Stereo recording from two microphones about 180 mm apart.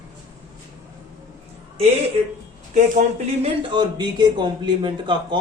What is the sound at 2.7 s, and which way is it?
Speech, 45° right (ahead or behind).